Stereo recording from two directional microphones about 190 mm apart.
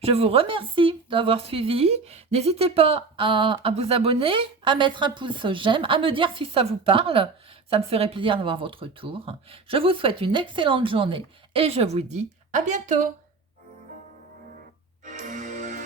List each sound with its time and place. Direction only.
0.0 s speech: 30° right (ahead or behind)
15.0 s music: 40° right (ahead or behind)